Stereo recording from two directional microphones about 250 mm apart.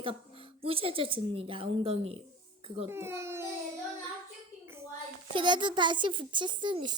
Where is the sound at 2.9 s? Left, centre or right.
Centre.